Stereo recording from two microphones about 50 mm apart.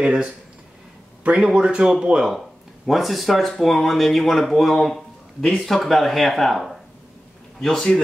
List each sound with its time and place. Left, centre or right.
0.0 s speech: centre
1.4 s speech: centre
2.9 s a man's voice: centre